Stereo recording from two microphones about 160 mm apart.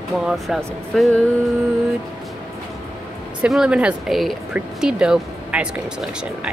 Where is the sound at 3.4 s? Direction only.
5° right (ahead or behind).